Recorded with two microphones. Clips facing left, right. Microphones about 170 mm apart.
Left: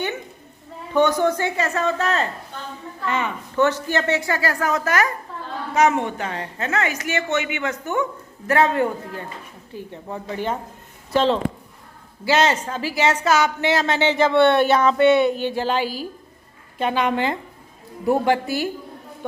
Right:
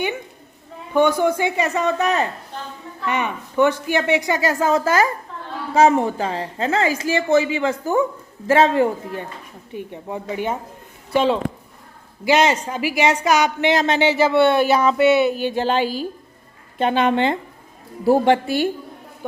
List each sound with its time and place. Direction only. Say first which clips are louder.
0.9 s a woman's voice: right 1 dB; 10° right (ahead or behind); by 9.2 s 25° right (ahead or behind)
9.7 s a woman's voice: right 3 dB; 15° right (ahead or behind)
15.5 s a woman's voice: right 3 dB; 25° right (ahead or behind)